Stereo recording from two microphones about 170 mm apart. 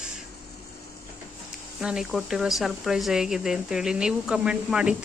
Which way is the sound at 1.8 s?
5° right (ahead or behind).